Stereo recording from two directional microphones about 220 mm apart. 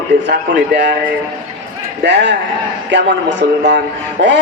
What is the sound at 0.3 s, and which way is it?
Speech, 45° right (ahead or behind).